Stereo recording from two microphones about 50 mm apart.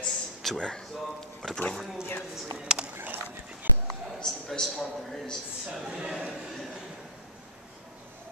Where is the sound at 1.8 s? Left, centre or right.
Centre.